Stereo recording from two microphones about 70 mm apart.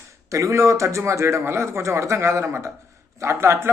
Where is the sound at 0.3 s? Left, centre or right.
Right.